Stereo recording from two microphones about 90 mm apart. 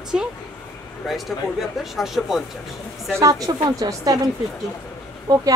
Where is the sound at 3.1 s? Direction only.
40° right (ahead or behind).